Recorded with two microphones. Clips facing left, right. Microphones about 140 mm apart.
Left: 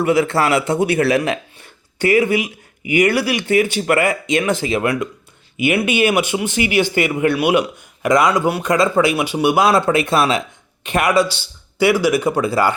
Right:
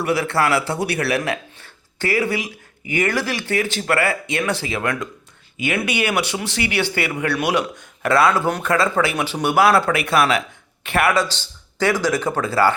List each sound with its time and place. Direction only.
0.0 s speech: 20° left (ahead or behind)